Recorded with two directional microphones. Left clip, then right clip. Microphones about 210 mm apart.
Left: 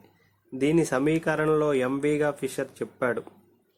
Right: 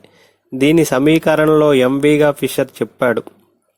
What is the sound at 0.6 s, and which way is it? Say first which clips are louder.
Speech: right 11 dB; 40° right (ahead or behind).